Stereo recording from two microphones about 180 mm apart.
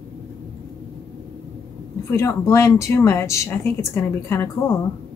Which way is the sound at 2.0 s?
15° left (ahead or behind).